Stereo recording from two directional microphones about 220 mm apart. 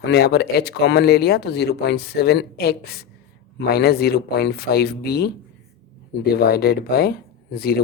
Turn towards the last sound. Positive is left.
turn(degrees=45)  # may be behind; listen again after turning